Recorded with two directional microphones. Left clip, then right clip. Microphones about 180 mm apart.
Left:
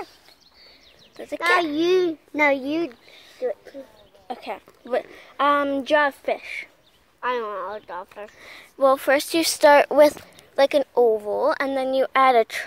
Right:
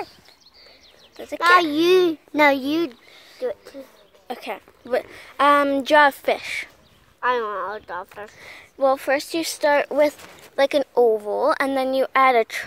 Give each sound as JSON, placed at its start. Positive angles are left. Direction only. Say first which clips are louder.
{"t": 1.1, "sound": "a child's voice", "louder": "even", "side_deg": 0}
{"t": 1.4, "sound": "a child's voice", "louder": "right 4 dB", "side_deg": -55}
{"t": 4.3, "sound": "a woman's voice", "louder": "right 1 dB", "side_deg": -10}
{"t": 7.2, "sound": "speech", "louder": "right 4 dB", "side_deg": -35}
{"t": 8.4, "sound": "speech", "louder": "left 1 dB", "side_deg": 0}
{"t": 10.5, "sound": "a woman's voice", "louder": "even", "side_deg": 0}